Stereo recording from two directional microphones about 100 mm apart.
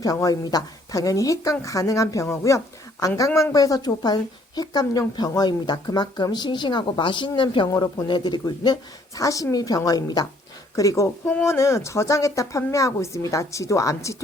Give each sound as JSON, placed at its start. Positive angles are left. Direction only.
{"t": 0.0, "sound": "a woman's voice", "side_deg": 40}
{"t": 7.7, "sound": "a woman's voice", "side_deg": 45}